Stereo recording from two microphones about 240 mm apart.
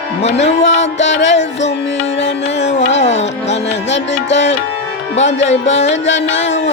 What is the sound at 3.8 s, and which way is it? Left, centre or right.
Music, left.